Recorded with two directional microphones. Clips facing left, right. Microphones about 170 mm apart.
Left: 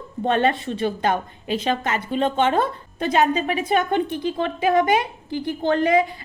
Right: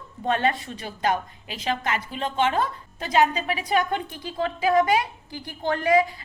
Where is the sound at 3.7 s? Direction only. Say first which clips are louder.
Left 4 dB; 25° left (ahead or behind).